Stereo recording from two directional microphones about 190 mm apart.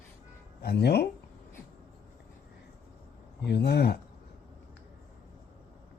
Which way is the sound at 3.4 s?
60° left (ahead or behind).